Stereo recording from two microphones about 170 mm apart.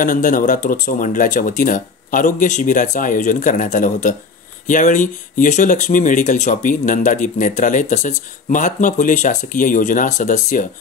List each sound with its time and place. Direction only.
0.0 s speech: 50° left (ahead or behind)